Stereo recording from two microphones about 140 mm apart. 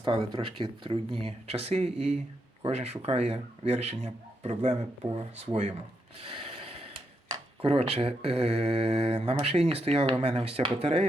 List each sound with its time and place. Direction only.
0.0 s speech: 35° right (ahead or behind); by 5.7 s 50° right (ahead or behind)
6.1 s mechanisms: 45° right (ahead or behind)
7.6 s speech: 45° right (ahead or behind)